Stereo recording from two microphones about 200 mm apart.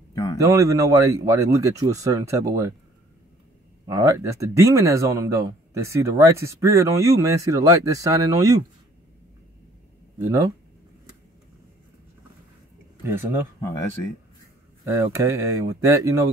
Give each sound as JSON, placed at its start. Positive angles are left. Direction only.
{"t": 0.1, "sound": "a sound", "side_deg": 20}
{"t": 0.4, "sound": "speech", "side_deg": -15}
{"t": 3.8, "sound": "speech", "side_deg": -15}
{"t": 10.2, "sound": "speech", "side_deg": -15}
{"t": 13.0, "sound": "speech", "side_deg": -10}
{"t": 15.1, "sound": "speech", "side_deg": -15}